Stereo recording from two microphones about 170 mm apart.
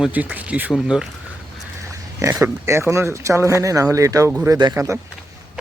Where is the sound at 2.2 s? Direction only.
15° right (ahead or behind).